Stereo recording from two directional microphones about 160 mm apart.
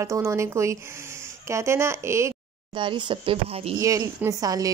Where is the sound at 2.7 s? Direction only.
30° right (ahead or behind).